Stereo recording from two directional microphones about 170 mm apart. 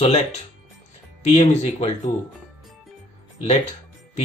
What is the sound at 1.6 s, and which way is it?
Speech, 40° left (ahead or behind).